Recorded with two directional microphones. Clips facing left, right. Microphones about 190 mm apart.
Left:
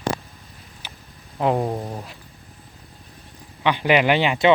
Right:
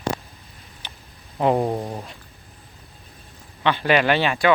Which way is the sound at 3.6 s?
15° left (ahead or behind).